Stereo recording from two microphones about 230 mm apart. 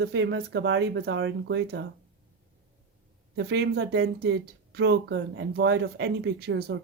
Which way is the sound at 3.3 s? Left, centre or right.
Right.